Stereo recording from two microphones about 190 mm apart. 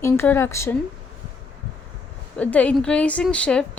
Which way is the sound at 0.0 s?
15° left (ahead or behind).